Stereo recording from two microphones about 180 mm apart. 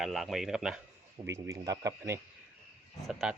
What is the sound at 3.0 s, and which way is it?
Speech, centre (ahead or behind).